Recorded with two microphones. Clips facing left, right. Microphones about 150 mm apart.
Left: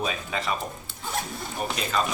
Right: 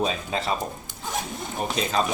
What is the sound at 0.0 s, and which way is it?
Speech, 30° right (ahead or behind).